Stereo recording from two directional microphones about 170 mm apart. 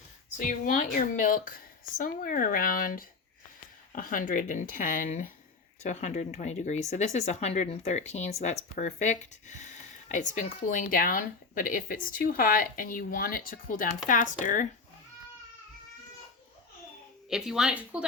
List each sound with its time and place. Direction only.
0.3 s speech: 50° left (ahead or behind)
17.2 s a woman's voice: 5° right (ahead or behind)